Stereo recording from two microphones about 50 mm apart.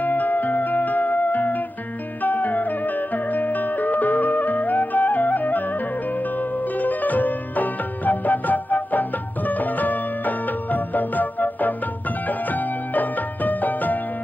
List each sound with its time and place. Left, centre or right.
0.0 s music: left